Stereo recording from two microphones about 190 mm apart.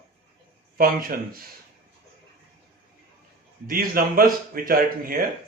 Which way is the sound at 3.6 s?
50° right (ahead or behind).